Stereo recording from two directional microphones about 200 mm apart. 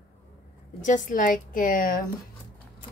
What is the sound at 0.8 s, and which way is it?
A woman's voice, 40° left (ahead or behind).